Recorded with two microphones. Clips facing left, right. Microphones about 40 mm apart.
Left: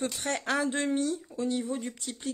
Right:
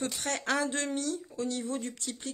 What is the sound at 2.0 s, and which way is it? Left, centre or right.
Speech, centre.